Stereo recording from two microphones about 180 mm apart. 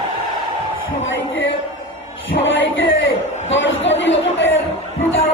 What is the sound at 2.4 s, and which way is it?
Music, 90° left.